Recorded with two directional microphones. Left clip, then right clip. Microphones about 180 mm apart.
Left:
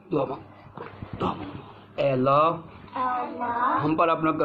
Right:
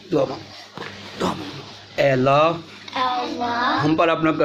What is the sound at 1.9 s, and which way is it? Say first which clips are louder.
A man's voice: right 5 dB; 10° right (ahead or behind).